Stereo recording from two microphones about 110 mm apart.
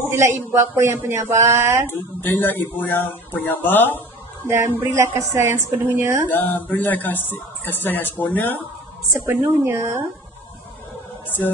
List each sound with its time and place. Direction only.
0.1 s a woman's voice: 25° right (ahead or behind)
1.9 s speech: 20° left (ahead or behind)
4.5 s a woman's voice: 25° right (ahead or behind)
6.2 s speech: 20° left (ahead or behind)
9.6 s a woman's voice: 25° right (ahead or behind)
11.2 s a sound: 20° left (ahead or behind)